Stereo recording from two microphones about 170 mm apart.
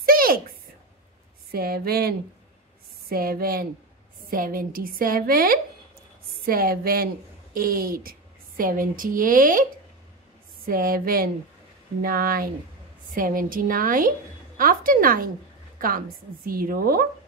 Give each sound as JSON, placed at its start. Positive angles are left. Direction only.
{"t": 0.0, "sound": "a sound", "side_deg": -60}
{"t": 1.5, "sound": "a woman's voice", "side_deg": -60}
{"t": 10.7, "sound": "a woman's voice", "side_deg": -60}